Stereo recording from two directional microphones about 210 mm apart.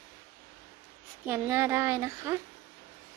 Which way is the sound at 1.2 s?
10° right (ahead or behind).